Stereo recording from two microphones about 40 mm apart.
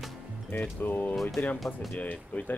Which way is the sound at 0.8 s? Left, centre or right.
Left.